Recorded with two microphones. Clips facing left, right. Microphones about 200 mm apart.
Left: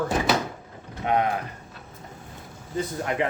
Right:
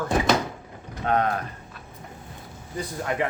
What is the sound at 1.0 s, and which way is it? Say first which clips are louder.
Speech: even; 15° left (ahead or behind).